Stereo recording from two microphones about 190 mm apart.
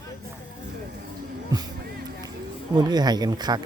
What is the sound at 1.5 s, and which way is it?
Music, 20° right (ahead or behind).